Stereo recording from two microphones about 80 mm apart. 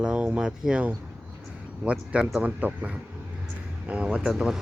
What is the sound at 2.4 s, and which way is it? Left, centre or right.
Speech, centre.